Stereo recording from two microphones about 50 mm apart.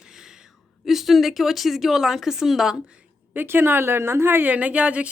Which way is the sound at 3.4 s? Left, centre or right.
Right.